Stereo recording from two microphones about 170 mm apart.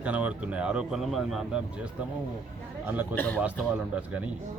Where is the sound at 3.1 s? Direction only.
10° left (ahead or behind).